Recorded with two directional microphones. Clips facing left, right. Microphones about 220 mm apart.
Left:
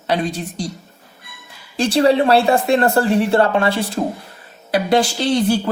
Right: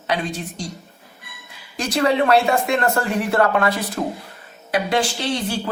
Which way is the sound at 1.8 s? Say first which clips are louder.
Left 5 dB; 30° left (ahead or behind).